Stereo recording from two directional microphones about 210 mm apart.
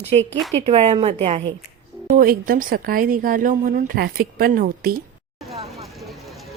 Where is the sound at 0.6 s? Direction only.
30° right (ahead or behind).